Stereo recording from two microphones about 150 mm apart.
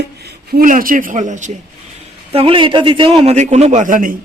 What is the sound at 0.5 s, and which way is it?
Speech, 70° right (ahead or behind).